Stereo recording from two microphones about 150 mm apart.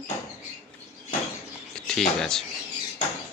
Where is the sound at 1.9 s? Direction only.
5° left (ahead or behind).